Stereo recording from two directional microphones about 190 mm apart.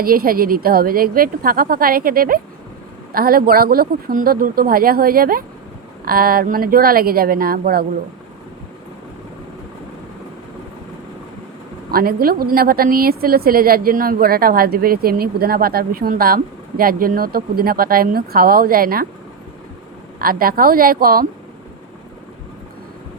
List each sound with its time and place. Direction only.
0.0 s a woman's voice: 50° right (ahead or behind)
11.9 s a woman's voice: 50° right (ahead or behind)
20.1 s a woman's voice: 50° right (ahead or behind)